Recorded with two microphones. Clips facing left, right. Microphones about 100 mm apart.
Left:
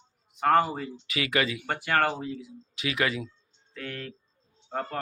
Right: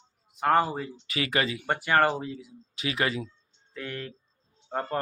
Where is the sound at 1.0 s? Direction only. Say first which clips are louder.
Left 1 dB; 30° right (ahead or behind).